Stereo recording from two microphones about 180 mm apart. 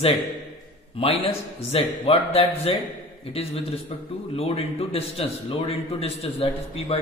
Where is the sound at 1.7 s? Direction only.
30° left (ahead or behind).